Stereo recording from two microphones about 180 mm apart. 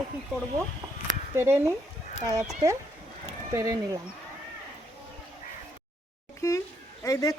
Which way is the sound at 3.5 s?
15° right (ahead or behind).